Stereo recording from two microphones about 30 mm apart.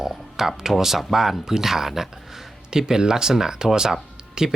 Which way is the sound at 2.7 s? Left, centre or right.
Right.